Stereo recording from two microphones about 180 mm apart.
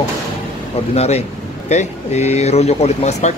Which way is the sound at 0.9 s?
35° left (ahead or behind).